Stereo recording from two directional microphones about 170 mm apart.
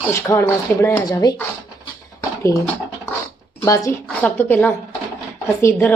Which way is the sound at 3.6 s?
20° left (ahead or behind).